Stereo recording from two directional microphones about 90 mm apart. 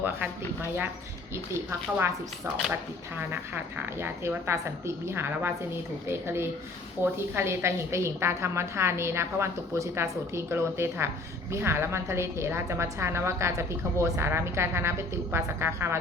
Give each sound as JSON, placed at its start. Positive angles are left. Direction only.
{"t": 0.0, "sound": "a woman's voice", "side_deg": -20}
{"t": 2.0, "sound": "a woman's voice", "side_deg": -25}